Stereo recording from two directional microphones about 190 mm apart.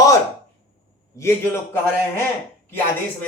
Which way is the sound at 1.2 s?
15° left (ahead or behind).